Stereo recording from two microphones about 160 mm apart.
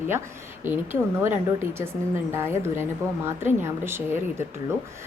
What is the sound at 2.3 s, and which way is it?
A woman's voice, 15° right (ahead or behind).